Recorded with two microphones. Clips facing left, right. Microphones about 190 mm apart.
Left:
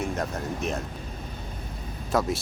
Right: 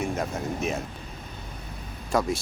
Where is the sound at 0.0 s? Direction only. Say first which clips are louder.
Right 1 dB; centre (ahead or behind).